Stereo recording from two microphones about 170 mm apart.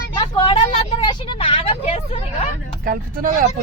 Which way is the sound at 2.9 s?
55° right (ahead or behind).